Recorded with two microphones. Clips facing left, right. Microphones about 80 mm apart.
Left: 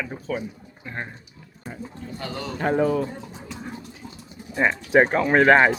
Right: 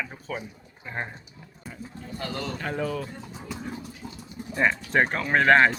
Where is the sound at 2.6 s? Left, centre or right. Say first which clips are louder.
Left 11 dB; left.